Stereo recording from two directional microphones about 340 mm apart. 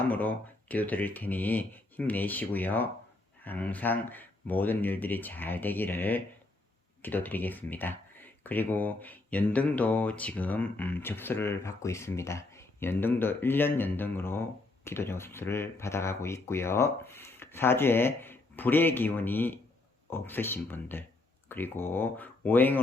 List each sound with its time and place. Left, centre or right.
0.1 s speech: centre